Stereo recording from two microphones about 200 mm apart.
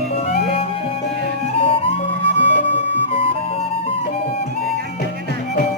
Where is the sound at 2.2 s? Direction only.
60° right (ahead or behind).